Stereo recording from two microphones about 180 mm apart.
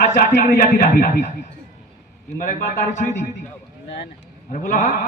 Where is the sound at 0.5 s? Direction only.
55° left (ahead or behind).